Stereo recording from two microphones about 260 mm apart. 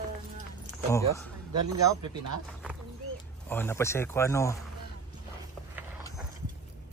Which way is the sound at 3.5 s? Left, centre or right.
Centre.